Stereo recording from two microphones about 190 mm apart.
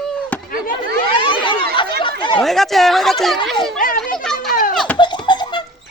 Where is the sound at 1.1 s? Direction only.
25° left (ahead or behind).